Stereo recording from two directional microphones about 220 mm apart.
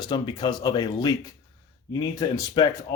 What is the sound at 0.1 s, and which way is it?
Speech, 20° left (ahead or behind).